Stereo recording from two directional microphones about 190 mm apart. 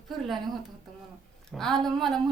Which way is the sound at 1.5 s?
Centre (ahead or behind).